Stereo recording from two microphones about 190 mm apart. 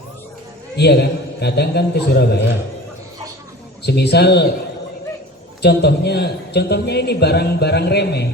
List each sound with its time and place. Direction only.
0.8 s a man's voice: 60° left (ahead or behind)
3.8 s a man's voice: 60° left (ahead or behind)
5.6 s a man's voice: 60° left (ahead or behind)